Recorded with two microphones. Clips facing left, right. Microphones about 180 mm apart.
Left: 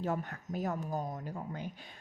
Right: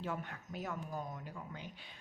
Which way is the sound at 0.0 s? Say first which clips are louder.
Left 6 dB; 40° left (ahead or behind).